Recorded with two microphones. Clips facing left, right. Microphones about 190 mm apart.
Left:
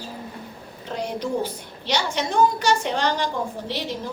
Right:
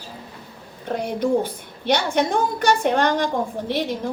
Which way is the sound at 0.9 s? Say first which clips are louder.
Right 5 dB; 55° right (ahead or behind).